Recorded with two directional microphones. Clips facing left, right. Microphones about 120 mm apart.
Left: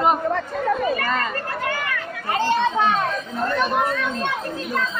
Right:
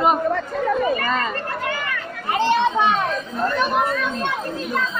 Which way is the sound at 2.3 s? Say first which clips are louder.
Right 2 dB; 20° right (ahead or behind).